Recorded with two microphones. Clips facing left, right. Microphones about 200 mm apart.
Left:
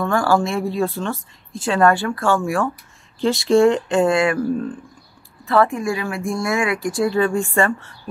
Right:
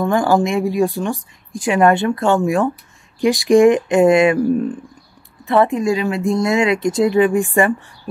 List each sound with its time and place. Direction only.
0.0 s speech: 15° right (ahead or behind)